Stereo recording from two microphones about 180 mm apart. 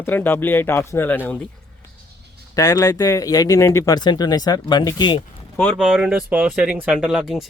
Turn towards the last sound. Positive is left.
turn(degrees=0)  # may be behind; listen again after turning